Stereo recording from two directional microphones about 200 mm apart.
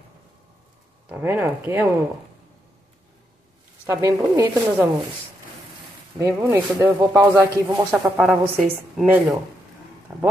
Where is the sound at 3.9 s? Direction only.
15° right (ahead or behind).